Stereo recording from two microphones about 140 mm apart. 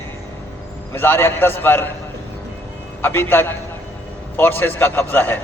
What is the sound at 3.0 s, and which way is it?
A man's voice, 15° left (ahead or behind).